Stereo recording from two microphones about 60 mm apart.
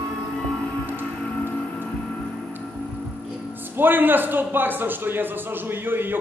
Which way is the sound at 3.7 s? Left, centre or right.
Right.